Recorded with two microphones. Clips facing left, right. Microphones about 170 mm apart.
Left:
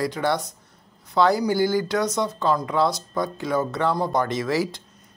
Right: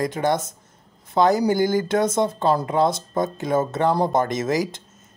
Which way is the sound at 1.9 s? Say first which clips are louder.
Right 3 dB; 50° right (ahead or behind).